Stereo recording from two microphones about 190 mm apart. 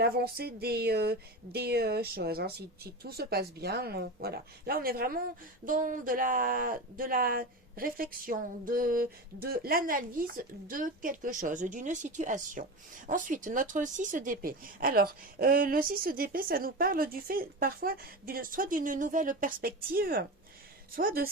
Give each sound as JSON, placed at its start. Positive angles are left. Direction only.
{"t": 0.0, "sound": "speech", "side_deg": -55}